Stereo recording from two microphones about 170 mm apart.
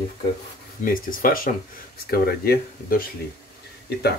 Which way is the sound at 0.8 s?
55° left (ahead or behind).